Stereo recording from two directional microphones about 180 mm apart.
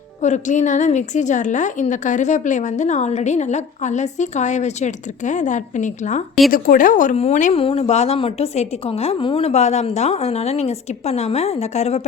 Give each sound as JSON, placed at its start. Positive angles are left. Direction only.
{"t": 0.2, "sound": "a woman's voice", "side_deg": 40}